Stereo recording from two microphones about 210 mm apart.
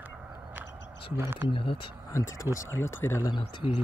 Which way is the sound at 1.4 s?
25° left (ahead or behind).